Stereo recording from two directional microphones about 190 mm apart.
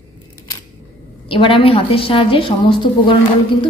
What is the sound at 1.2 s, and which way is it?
A woman's voice, 25° left (ahead or behind).